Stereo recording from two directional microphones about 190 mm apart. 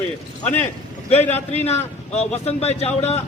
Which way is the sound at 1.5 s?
35° left (ahead or behind).